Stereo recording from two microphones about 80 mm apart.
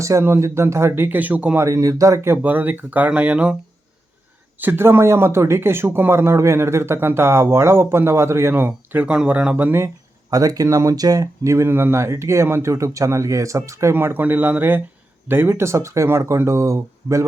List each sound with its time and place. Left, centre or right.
0.0 s speech: right
1.5 s speech: right
2.4 s speech: right
4.6 s speech: right
9.0 s speech: centre
9.7 s a sound: right
10.3 s speech: right
13.9 s speech: right